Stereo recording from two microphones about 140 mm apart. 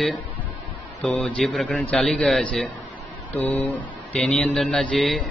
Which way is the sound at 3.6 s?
40° left (ahead or behind).